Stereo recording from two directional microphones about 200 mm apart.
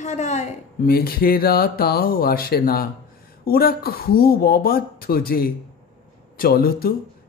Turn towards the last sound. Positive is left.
turn(degrees=45)  # may be behind; listen again after turning